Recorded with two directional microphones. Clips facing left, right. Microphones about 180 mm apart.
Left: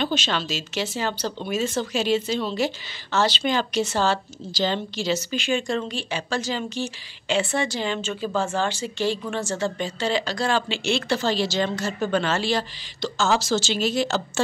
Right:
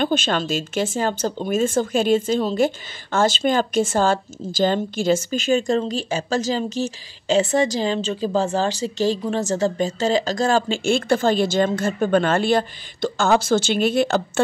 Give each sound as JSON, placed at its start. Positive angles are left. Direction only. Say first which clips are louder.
{"t": 0.0, "sound": "a woman's voice", "louder": "right 4 dB", "side_deg": -50}